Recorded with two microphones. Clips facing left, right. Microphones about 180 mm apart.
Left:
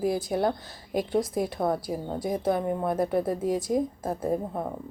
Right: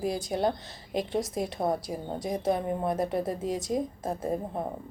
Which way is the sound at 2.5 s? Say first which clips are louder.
Left 1 dB; 20° right (ahead or behind).